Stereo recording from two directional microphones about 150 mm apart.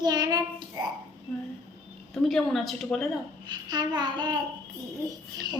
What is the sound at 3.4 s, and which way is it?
Babbling, 30° right (ahead or behind).